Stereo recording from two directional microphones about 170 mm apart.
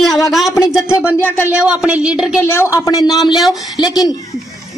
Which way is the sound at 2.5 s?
15° left (ahead or behind).